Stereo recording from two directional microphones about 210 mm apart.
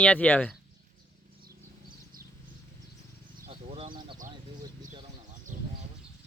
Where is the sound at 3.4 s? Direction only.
30° right (ahead or behind).